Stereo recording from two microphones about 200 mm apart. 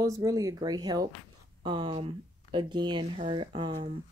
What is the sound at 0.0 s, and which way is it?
Speech, 15° right (ahead or behind).